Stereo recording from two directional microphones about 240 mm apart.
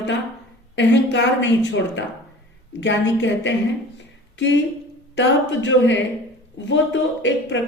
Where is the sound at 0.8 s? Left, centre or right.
Left.